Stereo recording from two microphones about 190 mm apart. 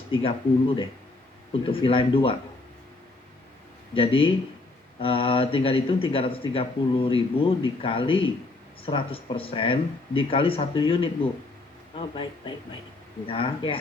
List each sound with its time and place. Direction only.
0.1 s a man's voice: 30° left (ahead or behind)
3.9 s a man's voice: 30° left (ahead or behind)